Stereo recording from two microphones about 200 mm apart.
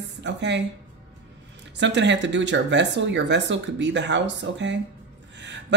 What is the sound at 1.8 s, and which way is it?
Speech, 60° right (ahead or behind).